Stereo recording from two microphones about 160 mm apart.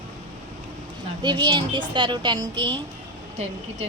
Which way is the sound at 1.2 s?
30° right (ahead or behind).